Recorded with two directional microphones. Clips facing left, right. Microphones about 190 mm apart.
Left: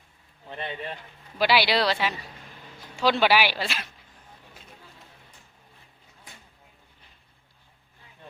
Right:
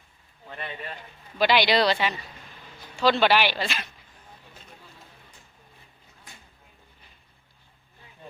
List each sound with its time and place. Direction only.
0.4 s speech: 25° left (ahead or behind)
1.4 s speech: 5° left (ahead or behind)